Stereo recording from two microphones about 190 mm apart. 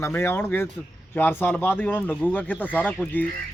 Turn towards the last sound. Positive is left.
turn(degrees=10)  # may be behind; listen again after turning